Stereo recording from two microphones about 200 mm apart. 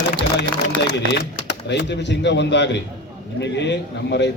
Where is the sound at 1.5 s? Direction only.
60° left (ahead or behind).